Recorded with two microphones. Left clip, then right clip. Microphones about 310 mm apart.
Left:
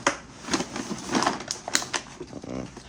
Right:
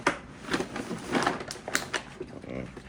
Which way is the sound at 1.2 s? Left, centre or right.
Left.